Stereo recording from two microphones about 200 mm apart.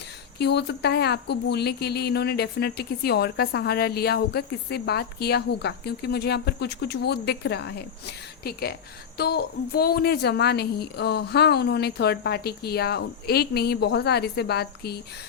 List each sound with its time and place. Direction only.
0.3 s a woman's voice: 55° left (ahead or behind)